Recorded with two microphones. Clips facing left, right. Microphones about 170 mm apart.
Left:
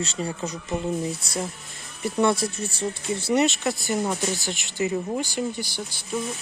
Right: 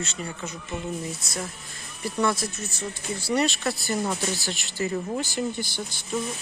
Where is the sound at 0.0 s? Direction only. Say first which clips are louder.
Left 5 dB; 30° left (ahead or behind).